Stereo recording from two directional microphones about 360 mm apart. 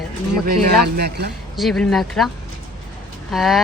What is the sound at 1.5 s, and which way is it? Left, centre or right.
Speech, centre.